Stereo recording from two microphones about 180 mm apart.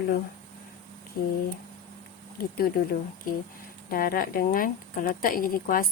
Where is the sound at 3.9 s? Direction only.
55° left (ahead or behind).